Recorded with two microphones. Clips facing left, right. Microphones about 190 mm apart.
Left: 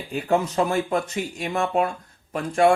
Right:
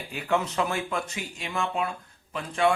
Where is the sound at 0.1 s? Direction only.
35° left (ahead or behind).